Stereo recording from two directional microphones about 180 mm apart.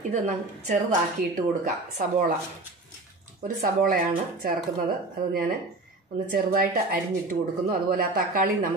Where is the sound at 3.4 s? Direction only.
50° right (ahead or behind).